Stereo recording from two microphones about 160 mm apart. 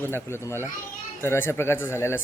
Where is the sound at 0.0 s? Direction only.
15° left (ahead or behind).